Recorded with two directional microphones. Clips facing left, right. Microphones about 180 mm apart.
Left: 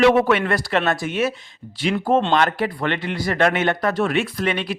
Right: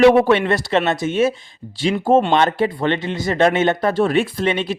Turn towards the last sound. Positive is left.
turn(degrees=-25)  # may be behind; listen again after turning